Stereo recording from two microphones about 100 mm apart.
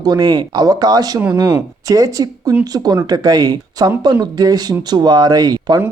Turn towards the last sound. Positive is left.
turn(degrees=-40)  # may be behind; listen again after turning